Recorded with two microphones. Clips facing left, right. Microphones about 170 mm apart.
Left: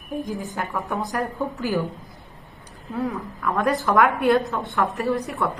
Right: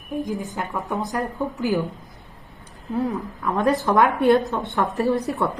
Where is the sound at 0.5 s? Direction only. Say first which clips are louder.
Even; 20° right (ahead or behind).